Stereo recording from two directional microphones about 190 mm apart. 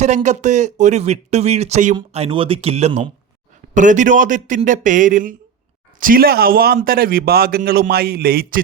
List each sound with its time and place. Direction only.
0.0 s a man's voice: 40° right (ahead or behind)